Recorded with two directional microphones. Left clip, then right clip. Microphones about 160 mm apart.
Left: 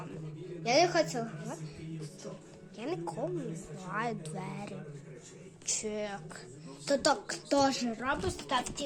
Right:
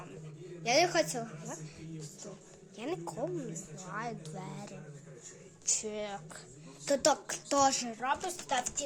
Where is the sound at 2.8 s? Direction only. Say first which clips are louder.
Left 1 dB; 30° right (ahead or behind).